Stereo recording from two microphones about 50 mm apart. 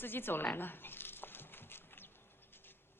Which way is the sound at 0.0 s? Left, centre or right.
Left.